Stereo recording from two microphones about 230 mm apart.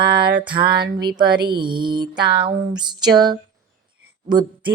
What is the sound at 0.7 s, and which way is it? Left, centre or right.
Speech, right.